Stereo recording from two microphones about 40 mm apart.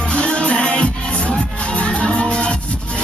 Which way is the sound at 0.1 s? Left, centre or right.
Left.